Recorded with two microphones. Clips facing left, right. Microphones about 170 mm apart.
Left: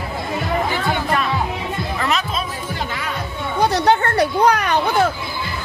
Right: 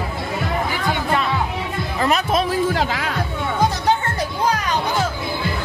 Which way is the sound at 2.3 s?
90° right.